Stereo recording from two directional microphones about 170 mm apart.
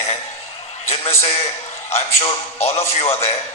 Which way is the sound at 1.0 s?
40° left (ahead or behind).